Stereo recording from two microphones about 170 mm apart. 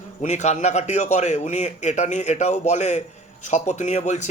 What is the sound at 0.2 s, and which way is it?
A man's voice, 45° left (ahead or behind).